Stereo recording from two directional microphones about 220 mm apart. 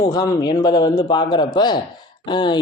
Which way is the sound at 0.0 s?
15° left (ahead or behind).